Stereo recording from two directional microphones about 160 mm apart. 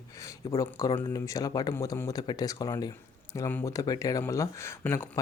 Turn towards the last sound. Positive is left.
turn(degrees=15)  # may be behind; listen again after turning